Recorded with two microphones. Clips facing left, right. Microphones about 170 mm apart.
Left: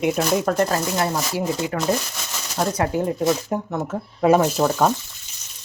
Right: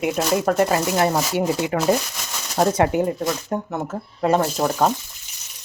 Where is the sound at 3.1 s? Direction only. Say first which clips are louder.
Left 2 dB; centre (ahead or behind).